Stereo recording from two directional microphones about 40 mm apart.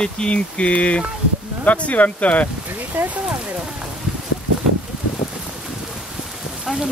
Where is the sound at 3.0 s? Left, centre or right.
Right.